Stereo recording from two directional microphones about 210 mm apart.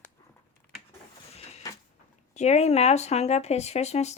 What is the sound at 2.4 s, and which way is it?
Speech, 30° left (ahead or behind).